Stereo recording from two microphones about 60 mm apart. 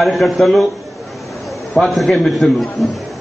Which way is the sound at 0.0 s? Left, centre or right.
Centre.